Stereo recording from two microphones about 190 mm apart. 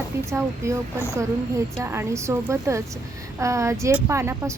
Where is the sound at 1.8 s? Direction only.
15° right (ahead or behind).